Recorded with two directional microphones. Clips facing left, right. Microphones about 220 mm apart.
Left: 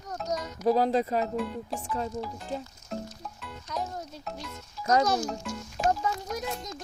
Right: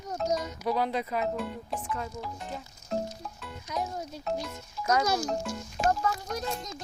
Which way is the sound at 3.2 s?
Centre (ahead or behind).